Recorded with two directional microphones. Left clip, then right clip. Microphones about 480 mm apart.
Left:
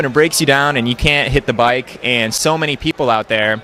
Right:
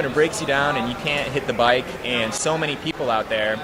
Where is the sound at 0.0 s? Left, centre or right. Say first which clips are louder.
Left 7 dB; left.